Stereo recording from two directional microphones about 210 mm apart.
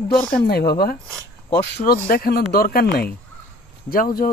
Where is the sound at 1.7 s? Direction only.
45° left (ahead or behind).